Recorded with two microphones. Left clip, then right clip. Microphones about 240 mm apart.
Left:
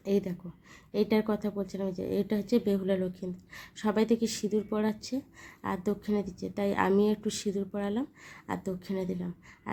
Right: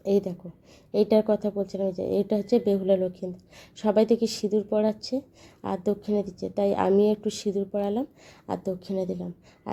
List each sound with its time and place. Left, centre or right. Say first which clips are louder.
0.0 s speech: right 6 dB; centre